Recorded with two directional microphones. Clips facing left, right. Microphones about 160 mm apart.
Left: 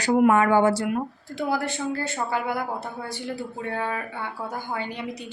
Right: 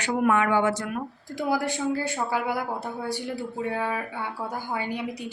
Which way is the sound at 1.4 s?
10° right (ahead or behind).